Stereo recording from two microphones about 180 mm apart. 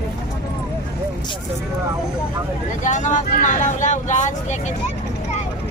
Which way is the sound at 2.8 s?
40° left (ahead or behind).